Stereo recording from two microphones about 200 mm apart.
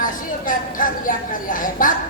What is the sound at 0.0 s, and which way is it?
A woman's voice, 45° left (ahead or behind).